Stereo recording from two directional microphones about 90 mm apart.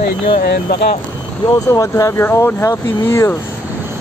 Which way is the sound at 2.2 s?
30° left (ahead or behind).